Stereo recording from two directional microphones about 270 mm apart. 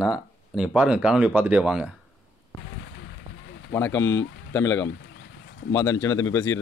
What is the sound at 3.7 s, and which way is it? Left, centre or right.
Speech, centre.